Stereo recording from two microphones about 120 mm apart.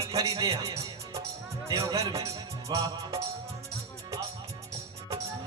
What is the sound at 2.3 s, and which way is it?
Music, 30° right (ahead or behind).